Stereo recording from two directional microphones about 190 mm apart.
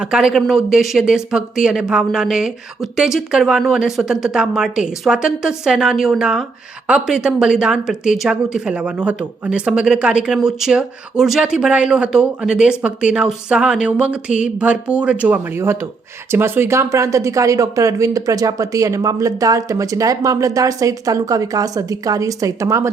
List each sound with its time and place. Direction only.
0.0 s speech: 5° right (ahead or behind)